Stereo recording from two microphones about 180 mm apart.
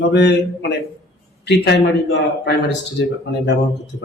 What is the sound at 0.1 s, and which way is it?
A man's voice, 70° left (ahead or behind).